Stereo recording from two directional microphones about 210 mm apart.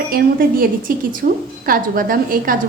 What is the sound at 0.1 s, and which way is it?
A woman's voice, 45° right (ahead or behind).